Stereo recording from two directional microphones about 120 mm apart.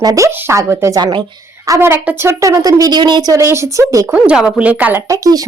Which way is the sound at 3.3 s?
25° right (ahead or behind).